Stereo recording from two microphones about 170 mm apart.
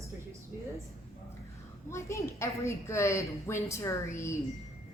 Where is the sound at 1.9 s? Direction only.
15° left (ahead or behind).